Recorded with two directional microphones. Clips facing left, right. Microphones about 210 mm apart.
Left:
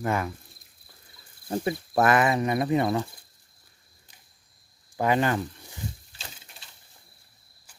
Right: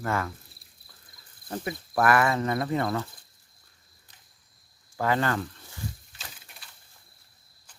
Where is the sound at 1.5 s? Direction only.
25° left (ahead or behind).